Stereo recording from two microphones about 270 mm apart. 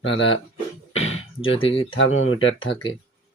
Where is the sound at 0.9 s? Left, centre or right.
Left.